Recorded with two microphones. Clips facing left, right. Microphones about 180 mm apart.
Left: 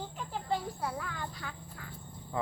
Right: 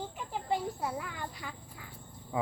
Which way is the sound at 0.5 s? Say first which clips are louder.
Right 1 dB; 15° right (ahead or behind).